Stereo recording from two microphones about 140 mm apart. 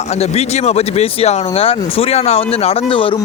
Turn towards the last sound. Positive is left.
turn(degrees=40)  # may be behind; listen again after turning